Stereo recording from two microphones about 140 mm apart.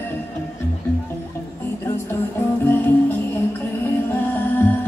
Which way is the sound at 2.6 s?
15° left (ahead or behind).